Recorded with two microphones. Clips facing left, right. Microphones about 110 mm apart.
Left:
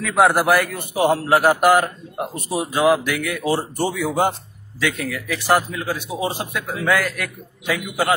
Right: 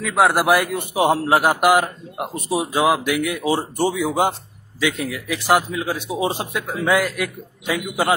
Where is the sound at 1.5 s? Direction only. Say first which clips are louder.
Left 1 dB; 10° right (ahead or behind).